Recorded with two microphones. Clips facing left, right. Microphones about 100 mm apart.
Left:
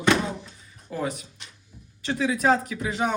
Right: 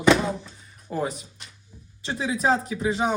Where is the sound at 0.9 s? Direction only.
35° right (ahead or behind).